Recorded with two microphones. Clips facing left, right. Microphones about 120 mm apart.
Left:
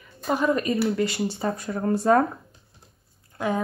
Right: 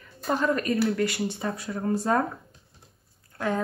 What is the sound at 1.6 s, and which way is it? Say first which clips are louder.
Speech: left 1 dB; 50° left (ahead or behind).